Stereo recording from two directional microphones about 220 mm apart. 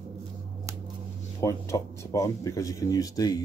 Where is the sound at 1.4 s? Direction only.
15° left (ahead or behind).